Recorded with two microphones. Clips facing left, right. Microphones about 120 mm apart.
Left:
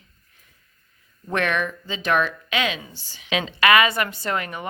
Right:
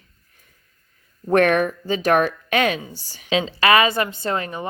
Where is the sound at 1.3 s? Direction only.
45° right (ahead or behind).